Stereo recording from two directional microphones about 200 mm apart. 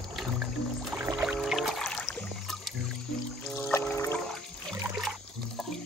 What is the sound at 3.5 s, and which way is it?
Music, 10° left (ahead or behind).